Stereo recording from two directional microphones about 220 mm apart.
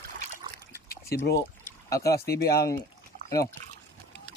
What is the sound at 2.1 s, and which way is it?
Speech, 45° left (ahead or behind).